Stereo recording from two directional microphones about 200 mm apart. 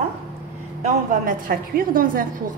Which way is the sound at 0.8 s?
40° right (ahead or behind).